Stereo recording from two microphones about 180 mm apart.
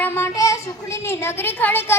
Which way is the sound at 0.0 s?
15° left (ahead or behind).